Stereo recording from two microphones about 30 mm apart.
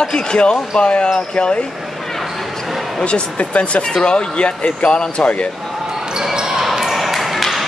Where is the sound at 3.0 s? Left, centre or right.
Left.